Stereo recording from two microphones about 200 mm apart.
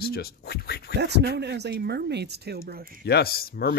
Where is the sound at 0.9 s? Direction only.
55° right (ahead or behind).